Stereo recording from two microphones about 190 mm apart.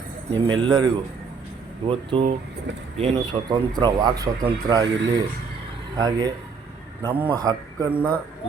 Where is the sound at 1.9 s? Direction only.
30° right (ahead or behind).